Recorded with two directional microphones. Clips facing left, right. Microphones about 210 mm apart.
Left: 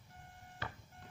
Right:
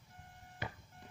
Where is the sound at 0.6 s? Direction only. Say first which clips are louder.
Right 2 dB; 15° right (ahead or behind).